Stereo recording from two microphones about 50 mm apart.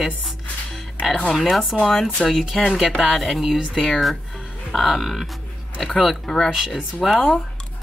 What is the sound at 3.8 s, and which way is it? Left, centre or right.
Speech, centre.